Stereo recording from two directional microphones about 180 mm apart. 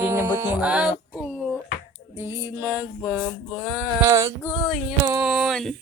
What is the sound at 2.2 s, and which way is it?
Music, 15° right (ahead or behind).